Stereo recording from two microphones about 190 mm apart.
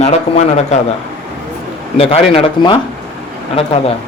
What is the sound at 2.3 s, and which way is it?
Speech, 25° left (ahead or behind).